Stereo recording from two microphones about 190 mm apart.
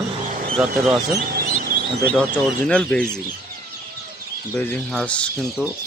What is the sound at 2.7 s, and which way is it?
Speech, 5° left (ahead or behind).